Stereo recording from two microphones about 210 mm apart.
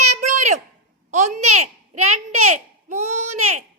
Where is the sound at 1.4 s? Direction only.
90° right.